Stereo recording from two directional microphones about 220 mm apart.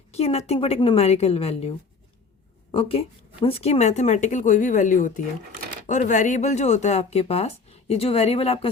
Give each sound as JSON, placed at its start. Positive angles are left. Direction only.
{"t": 0.1, "sound": "speech", "side_deg": 30}
{"t": 2.7, "sound": "speech", "side_deg": 25}